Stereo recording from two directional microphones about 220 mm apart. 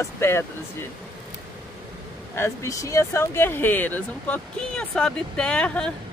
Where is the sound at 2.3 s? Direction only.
10° left (ahead or behind).